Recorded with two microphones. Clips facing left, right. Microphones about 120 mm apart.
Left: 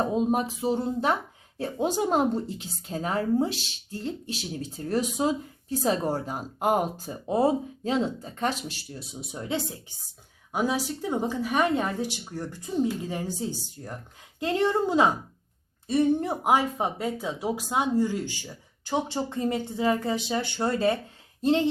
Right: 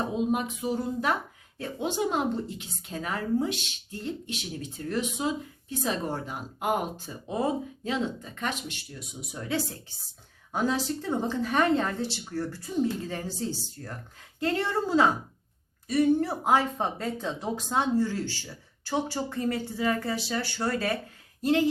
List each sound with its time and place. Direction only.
0.0 s a woman's voice: 40° left (ahead or behind)
1.5 s a woman's voice: 35° left (ahead or behind)
10.5 s speech: 10° left (ahead or behind); by 21.7 s 25° left (ahead or behind)